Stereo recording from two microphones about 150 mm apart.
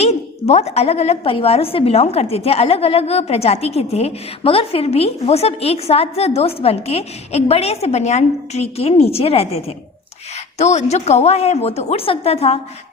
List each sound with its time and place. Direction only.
0.0 s a woman's voice: 45° left (ahead or behind)